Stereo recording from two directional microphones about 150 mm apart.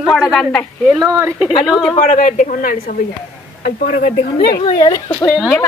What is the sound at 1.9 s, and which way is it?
A woman's voice, 55° left (ahead or behind).